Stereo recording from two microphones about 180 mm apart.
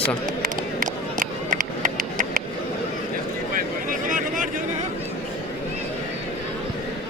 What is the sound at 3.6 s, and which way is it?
Vehicle, 50° right (ahead or behind).